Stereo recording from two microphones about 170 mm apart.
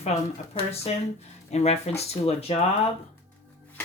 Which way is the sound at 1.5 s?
40° left (ahead or behind).